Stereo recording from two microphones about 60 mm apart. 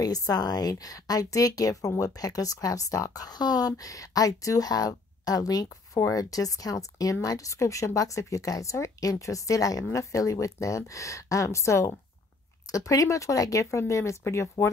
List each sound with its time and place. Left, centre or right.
0.0 s a woman's voice: left
9.9 s speech: left